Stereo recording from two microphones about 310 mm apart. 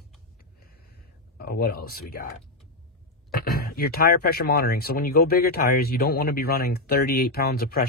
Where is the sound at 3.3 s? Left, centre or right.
Left.